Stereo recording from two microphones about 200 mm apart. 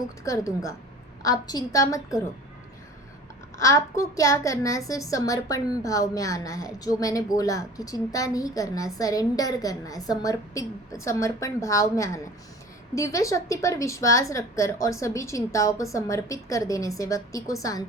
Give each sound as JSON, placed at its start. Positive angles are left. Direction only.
{"t": 0.3, "sound": "a woman's voice", "side_deg": 15}
{"t": 3.6, "sound": "a woman's voice", "side_deg": 15}